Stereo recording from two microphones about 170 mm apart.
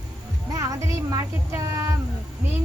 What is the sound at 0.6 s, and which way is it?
Speech, 20° right (ahead or behind).